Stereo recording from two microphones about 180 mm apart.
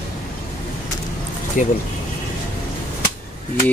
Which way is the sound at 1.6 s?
45° left (ahead or behind).